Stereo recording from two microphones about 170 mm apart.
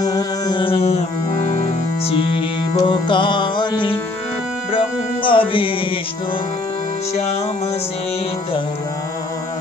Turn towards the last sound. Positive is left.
turn(degrees=40)  # may be behind; listen again after turning